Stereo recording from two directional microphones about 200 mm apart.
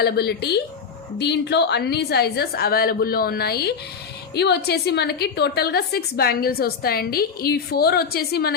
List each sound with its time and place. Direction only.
0.0 s a woman's voice: 55° left (ahead or behind)